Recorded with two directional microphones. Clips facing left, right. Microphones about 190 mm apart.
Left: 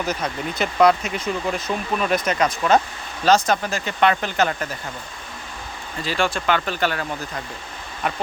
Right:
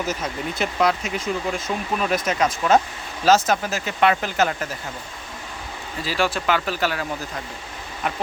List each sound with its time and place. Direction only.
0.0 s speech: centre (ahead or behind)
6.0 s speech: 5° right (ahead or behind)